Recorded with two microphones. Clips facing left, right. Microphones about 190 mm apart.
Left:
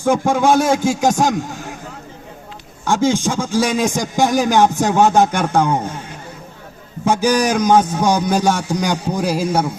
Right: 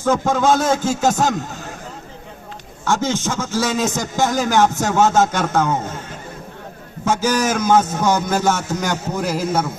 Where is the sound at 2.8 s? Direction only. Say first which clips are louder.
Left 4 dB; 15° left (ahead or behind).